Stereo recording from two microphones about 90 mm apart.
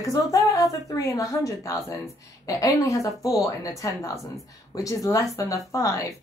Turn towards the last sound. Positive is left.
turn(degrees=35)  # may be behind; listen again after turning